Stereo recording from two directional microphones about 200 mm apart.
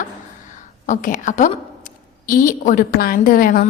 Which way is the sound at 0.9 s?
40° left (ahead or behind).